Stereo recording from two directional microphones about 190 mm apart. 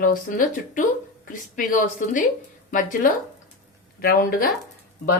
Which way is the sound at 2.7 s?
45° left (ahead or behind).